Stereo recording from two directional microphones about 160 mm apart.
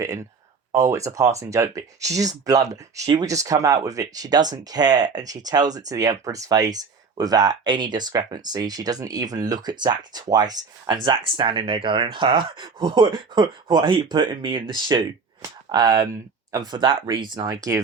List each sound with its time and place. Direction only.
0.7 s speech: 20° right (ahead or behind)